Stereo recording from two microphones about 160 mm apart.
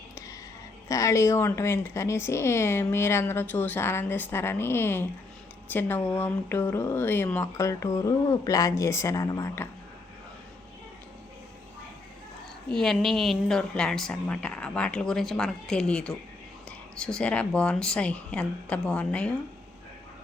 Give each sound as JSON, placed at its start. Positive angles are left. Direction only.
{"t": 0.9, "sound": "a woman's voice", "side_deg": 20}
{"t": 12.7, "sound": "a woman's voice", "side_deg": 0}